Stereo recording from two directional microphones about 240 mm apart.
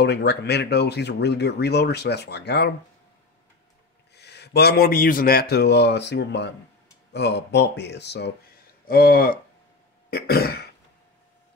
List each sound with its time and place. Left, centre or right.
0.0 s speech: left
4.1 s speech: left
10.0 s throat clearing: left